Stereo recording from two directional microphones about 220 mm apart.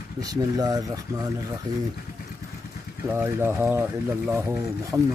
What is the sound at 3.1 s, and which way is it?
Speech, 10° right (ahead or behind).